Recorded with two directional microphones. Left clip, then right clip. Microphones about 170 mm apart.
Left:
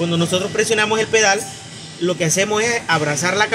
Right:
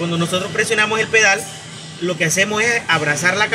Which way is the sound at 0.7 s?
15° left (ahead or behind).